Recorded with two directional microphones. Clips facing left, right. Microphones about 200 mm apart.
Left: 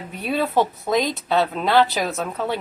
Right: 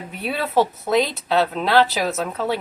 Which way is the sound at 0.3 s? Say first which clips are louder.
Even; centre (ahead or behind).